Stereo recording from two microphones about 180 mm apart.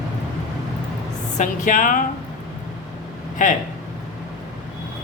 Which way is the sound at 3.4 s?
45° left (ahead or behind).